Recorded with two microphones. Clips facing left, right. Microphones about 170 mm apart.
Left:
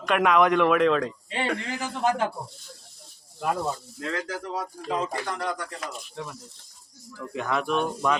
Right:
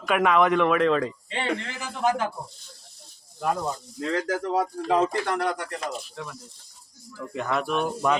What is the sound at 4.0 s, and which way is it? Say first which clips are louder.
Speech: right 5 dB; 40° right (ahead or behind).